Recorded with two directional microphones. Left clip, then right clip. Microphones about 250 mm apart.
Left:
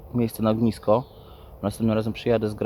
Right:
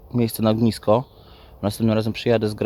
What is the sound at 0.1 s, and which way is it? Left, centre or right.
Speech, right.